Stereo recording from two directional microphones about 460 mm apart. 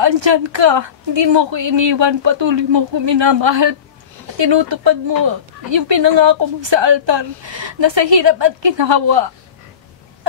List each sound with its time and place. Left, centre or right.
0.0 s a woman's voice: right